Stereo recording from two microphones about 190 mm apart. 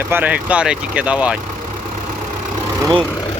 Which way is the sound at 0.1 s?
10° right (ahead or behind).